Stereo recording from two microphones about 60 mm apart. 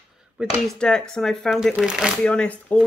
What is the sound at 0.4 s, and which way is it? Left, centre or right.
Speech, right.